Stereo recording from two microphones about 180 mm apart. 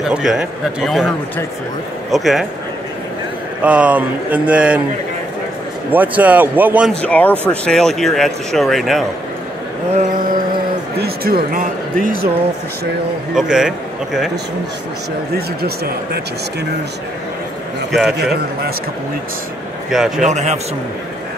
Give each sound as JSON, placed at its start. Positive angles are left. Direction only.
{"t": 0.1, "sound": "speech", "side_deg": -5}
{"t": 2.0, "sound": "speech", "side_deg": 0}
{"t": 3.6, "sound": "speech", "side_deg": -5}
{"t": 5.9, "sound": "speech", "side_deg": -10}
{"t": 7.0, "sound": "speech", "side_deg": 10}
{"t": 9.9, "sound": "mantra", "side_deg": -50}
{"t": 11.0, "sound": "a man's voice", "side_deg": -55}
{"t": 13.3, "sound": "speech", "side_deg": -5}
{"t": 15.3, "sound": "a man's voice", "side_deg": -60}
{"t": 18.2, "sound": "a man's voice", "side_deg": -60}
{"t": 19.9, "sound": "speech", "side_deg": 0}
{"t": 20.2, "sound": "a man's voice", "side_deg": -40}